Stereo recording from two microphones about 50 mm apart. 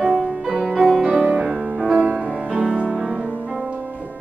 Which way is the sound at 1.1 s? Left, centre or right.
Right.